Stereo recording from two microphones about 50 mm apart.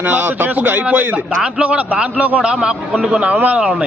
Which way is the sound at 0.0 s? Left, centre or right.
Right.